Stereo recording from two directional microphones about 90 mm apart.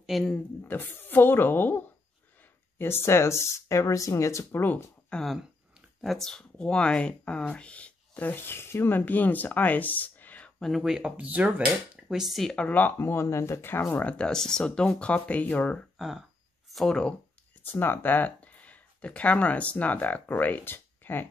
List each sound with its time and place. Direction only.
0.0 s speech: centre (ahead or behind)
0.3 s a woman's voice: 20° left (ahead or behind)
5.1 s speech: centre (ahead or behind); by 10.5 s 20° left (ahead or behind)
10.6 s speech: centre (ahead or behind)
12.6 s a woman's voice: 20° left (ahead or behind)
14.0 s speech: 10° left (ahead or behind)
16.0 s a sound: 5° right (ahead or behind)
17.6 s speech: 25° left (ahead or behind)